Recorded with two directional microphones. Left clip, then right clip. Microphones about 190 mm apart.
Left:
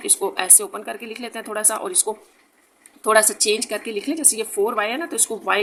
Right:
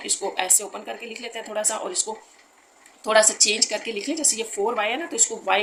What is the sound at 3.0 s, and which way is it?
Speech, 45° left (ahead or behind).